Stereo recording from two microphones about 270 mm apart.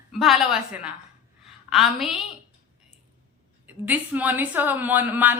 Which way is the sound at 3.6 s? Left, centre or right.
Centre.